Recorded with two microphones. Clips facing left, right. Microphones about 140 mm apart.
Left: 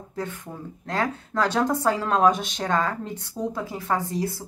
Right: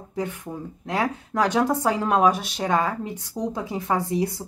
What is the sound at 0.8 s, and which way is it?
A woman's voice, 15° right (ahead or behind).